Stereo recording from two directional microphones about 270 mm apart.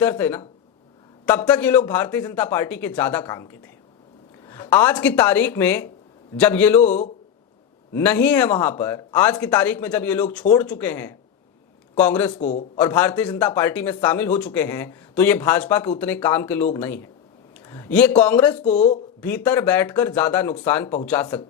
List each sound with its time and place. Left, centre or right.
0.0 s a man's voice: centre
7.9 s a man's voice: centre
12.4 s speech: left
12.7 s a man's voice: centre
18.6 s speech: left
19.2 s a man's voice: centre